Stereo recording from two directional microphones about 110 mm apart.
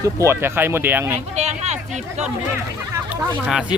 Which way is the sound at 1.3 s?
90° right.